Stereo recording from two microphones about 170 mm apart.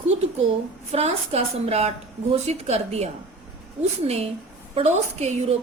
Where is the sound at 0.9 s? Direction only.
40° right (ahead or behind).